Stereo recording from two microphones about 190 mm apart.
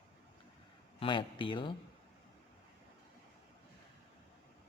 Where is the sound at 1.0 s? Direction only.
25° left (ahead or behind).